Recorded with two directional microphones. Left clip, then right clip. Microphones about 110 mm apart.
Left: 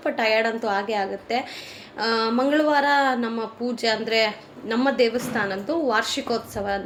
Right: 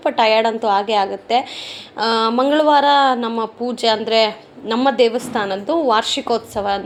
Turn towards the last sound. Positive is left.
turn(degrees=-40)  # may be behind; listen again after turning